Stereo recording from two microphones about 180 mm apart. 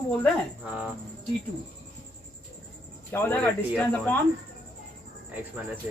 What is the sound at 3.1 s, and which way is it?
Speech, 10° left (ahead or behind).